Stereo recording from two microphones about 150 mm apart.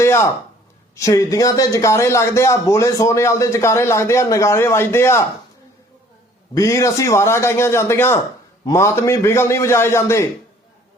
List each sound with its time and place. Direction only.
0.0 s a man's voice: 20° left (ahead or behind)
6.5 s a man's voice: 20° left (ahead or behind)